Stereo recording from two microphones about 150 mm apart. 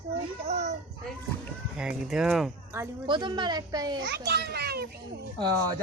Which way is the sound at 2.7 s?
20° right (ahead or behind).